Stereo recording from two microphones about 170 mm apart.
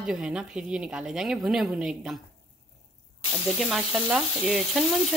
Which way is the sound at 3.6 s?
Centre (ahead or behind).